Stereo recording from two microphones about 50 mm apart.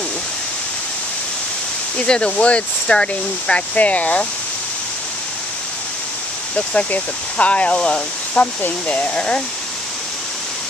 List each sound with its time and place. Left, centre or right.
2.0 s speech: left
6.5 s speech: left